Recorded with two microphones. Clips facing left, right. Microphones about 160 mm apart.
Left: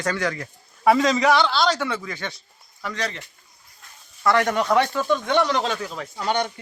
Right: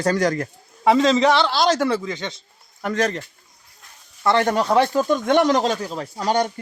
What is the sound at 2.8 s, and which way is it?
Speech, 50° right (ahead or behind).